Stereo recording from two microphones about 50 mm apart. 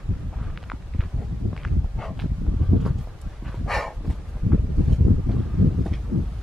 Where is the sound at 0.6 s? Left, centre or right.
Centre.